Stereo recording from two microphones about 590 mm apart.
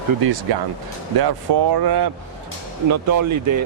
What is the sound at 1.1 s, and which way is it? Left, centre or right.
Speech, right.